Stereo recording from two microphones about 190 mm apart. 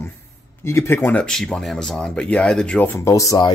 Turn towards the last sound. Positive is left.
turn(degrees=20)  # may be behind; listen again after turning